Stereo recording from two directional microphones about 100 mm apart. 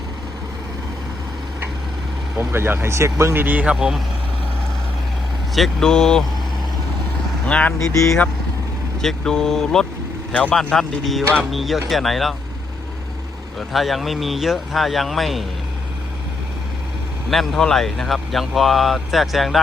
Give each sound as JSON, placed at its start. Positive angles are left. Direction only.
{"t": 2.4, "sound": "speech", "side_deg": -20}
{"t": 5.5, "sound": "speech", "side_deg": 5}
{"t": 7.4, "sound": "speech", "side_deg": 10}
{"t": 9.0, "sound": "speech", "side_deg": 5}
{"t": 13.6, "sound": "speech", "side_deg": 0}
{"t": 17.3, "sound": "speech", "side_deg": 5}